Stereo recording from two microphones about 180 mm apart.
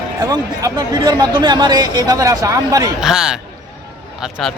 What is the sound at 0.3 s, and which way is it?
Speech, 20° right (ahead or behind).